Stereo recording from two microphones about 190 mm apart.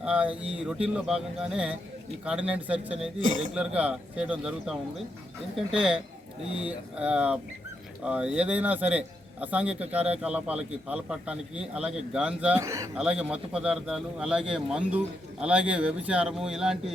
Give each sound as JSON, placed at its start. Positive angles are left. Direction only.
{"t": 0.0, "sound": "a man's voice", "side_deg": -5}
{"t": 3.2, "sound": "speech", "side_deg": -45}
{"t": 3.8, "sound": "a man's voice", "side_deg": -5}
{"t": 12.5, "sound": "a man's voice", "side_deg": -15}
{"t": 13.0, "sound": "a man's voice", "side_deg": -5}